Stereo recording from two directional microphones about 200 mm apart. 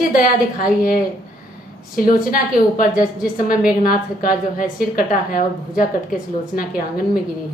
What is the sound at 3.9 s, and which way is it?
A woman's voice, 45° left (ahead or behind).